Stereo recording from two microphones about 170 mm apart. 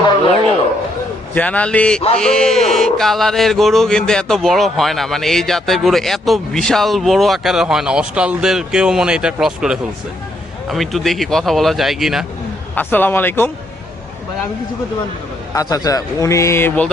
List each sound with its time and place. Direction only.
1.3 s a man's voice: 10° left (ahead or behind)
2.1 s a sound: 5° left (ahead or behind)
12.7 s a man's voice: 10° left (ahead or behind)
15.5 s a man's voice: 20° left (ahead or behind)